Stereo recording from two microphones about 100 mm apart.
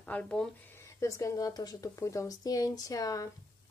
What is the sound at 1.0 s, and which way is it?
Speech, 30° left (ahead or behind).